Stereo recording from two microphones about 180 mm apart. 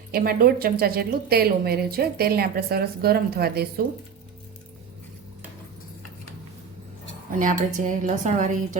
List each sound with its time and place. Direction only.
0.1 s speech: 55° right (ahead or behind)
7.3 s speech: 45° right (ahead or behind)